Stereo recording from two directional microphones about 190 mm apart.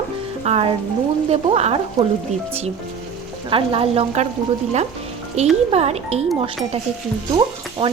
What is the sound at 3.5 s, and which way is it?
Speech, 30° right (ahead or behind).